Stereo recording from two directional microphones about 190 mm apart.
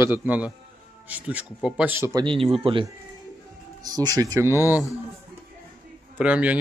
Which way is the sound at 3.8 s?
20° right (ahead or behind).